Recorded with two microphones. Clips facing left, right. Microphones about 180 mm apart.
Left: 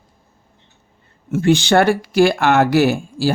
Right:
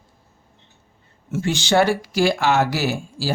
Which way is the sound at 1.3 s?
60° left (ahead or behind).